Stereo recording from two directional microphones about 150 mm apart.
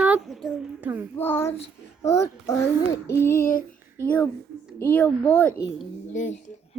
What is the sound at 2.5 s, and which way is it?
Child singing, 20° left (ahead or behind).